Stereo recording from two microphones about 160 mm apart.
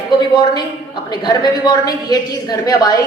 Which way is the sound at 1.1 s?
25° left (ahead or behind).